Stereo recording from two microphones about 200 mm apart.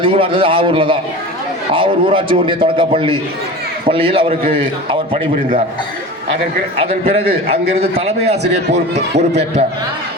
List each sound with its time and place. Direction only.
0.0 s a man's voice: 25° right (ahead or behind)
6.7 s a man's voice: 30° right (ahead or behind)